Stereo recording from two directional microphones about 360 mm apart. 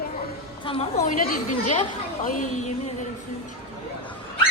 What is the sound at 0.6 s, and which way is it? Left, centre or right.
A child's voice, centre.